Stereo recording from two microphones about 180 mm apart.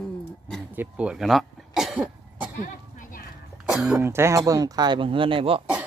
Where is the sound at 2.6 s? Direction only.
50° left (ahead or behind).